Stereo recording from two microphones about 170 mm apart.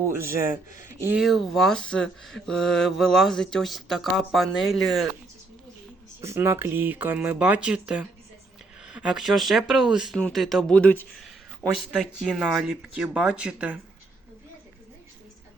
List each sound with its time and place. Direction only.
0.0 s speech: 15° right (ahead or behind)
0.7 s speech: 50° left (ahead or behind)
0.9 s speech: 15° right (ahead or behind)
1.2 s speech: centre (ahead or behind)
6.2 s speech: 15° right (ahead or behind)